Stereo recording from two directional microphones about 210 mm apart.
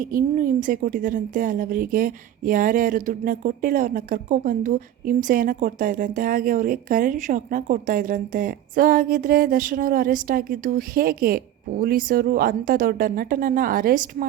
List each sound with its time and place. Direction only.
0.0 s a woman's voice: 40° right (ahead or behind)